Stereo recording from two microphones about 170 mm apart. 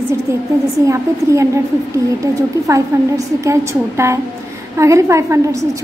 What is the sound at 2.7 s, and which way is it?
Speech, 20° right (ahead or behind).